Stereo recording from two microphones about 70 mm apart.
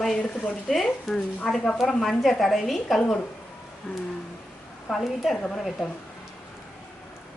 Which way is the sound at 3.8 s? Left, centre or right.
Left.